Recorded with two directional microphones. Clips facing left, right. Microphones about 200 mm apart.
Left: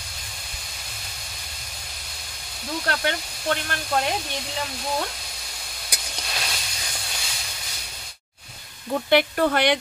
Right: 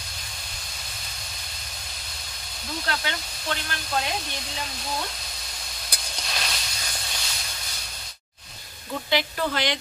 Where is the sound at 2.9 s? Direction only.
55° left (ahead or behind).